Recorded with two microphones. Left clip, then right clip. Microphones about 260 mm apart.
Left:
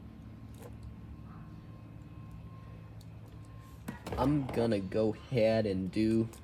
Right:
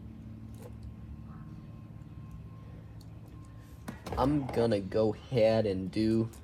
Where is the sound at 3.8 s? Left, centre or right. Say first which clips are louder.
Right 2 dB; centre.